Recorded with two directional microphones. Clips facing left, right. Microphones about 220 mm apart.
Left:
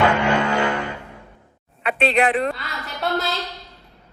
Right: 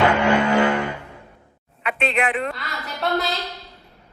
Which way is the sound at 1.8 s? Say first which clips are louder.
Left 4 dB; 35° left (ahead or behind).